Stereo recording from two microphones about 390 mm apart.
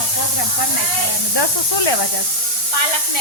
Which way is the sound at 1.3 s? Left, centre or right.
Left.